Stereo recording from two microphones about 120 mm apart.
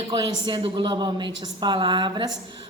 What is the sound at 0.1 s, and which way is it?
A woman's voice, 40° right (ahead or behind).